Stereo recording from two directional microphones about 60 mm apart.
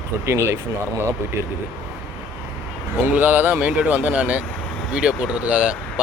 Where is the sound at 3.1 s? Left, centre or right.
Right.